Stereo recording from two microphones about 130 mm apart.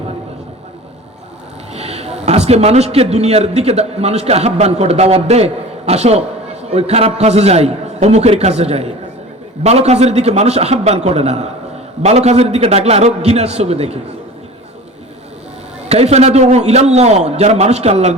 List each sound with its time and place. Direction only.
1.7 s a man's voice: 55° right (ahead or behind)
15.9 s a man's voice: 55° right (ahead or behind)